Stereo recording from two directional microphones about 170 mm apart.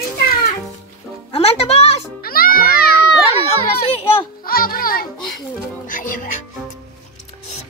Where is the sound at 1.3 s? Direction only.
35° left (ahead or behind).